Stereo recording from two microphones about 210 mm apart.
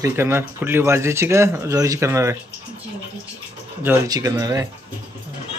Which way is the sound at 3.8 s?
15° right (ahead or behind).